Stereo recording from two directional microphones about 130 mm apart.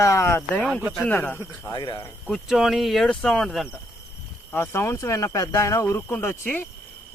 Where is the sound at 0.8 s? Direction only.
5° right (ahead or behind).